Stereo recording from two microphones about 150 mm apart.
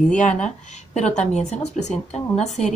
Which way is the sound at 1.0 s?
50° left (ahead or behind).